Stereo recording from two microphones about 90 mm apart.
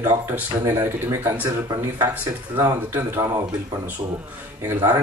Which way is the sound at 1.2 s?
25° right (ahead or behind).